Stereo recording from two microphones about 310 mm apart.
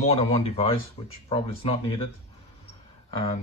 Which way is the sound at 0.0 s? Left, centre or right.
Left.